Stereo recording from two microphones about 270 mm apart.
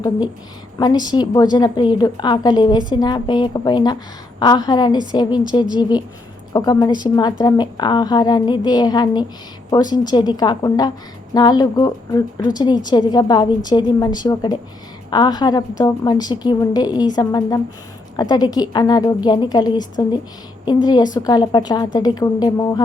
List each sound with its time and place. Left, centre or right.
0.8 s a woman's voice: centre
6.5 s a woman's voice: centre